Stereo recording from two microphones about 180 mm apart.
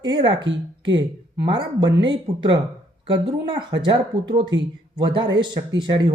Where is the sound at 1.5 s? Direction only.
25° right (ahead or behind).